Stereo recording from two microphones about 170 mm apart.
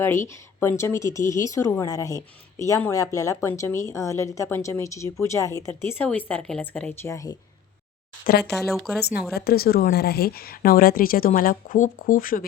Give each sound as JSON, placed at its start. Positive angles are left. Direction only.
{"t": 0.0, "sound": "speech", "side_deg": 15}
{"t": 7.1, "sound": "speech", "side_deg": 20}
{"t": 8.5, "sound": "speech", "side_deg": 0}
{"t": 9.0, "sound": "speech", "side_deg": 70}